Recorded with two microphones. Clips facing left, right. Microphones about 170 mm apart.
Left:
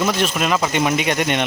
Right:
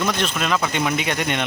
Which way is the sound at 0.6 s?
20° left (ahead or behind).